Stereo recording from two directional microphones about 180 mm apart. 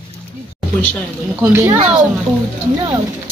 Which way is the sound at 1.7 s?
35° right (ahead or behind).